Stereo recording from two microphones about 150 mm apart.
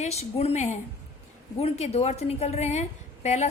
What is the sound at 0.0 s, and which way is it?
A woman's voice, 45° left (ahead or behind).